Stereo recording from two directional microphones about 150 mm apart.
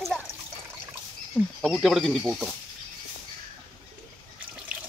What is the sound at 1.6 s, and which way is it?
Speech, centre (ahead or behind).